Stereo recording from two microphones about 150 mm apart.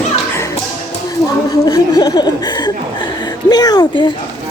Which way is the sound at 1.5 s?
25° left (ahead or behind).